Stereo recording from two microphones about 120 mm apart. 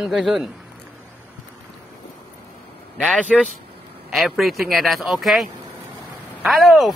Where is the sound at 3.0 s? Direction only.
10° left (ahead or behind).